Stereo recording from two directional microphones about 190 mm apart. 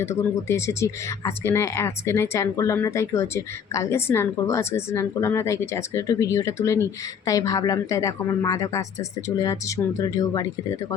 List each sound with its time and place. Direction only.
0.0 s speech: 15° left (ahead or behind)